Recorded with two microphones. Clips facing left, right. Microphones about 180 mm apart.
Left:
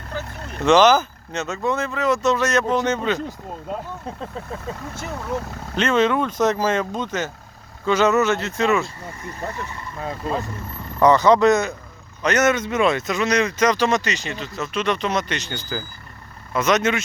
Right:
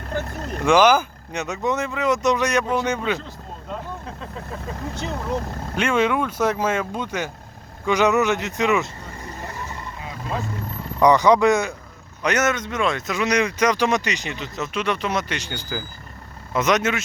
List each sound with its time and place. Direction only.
0.6 s speech: 10° right (ahead or behind)
4.9 s speech: 20° right (ahead or behind)
11.0 s speech: 15° right (ahead or behind)
12.5 s speech: 5° left (ahead or behind)
13.1 s speech: 15° right (ahead or behind)